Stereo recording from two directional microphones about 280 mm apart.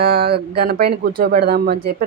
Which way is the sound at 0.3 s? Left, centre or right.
Right.